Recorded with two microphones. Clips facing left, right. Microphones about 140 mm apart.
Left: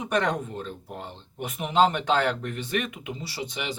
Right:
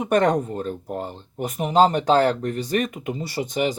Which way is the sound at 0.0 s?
45° right (ahead or behind).